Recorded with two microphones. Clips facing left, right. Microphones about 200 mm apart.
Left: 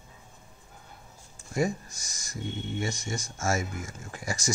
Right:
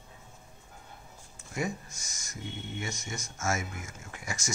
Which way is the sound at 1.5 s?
35° left (ahead or behind).